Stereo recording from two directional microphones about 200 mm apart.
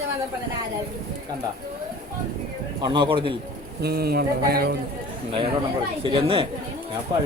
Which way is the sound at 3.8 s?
50° right (ahead or behind).